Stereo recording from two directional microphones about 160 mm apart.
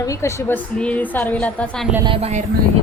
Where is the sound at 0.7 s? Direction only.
10° left (ahead or behind).